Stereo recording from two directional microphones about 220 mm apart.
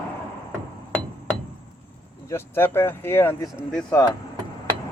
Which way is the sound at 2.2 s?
10° left (ahead or behind).